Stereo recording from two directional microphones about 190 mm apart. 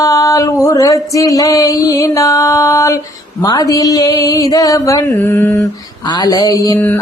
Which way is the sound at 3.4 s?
20° left (ahead or behind).